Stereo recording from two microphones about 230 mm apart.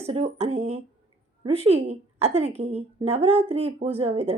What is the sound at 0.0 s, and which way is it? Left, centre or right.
Speech, right.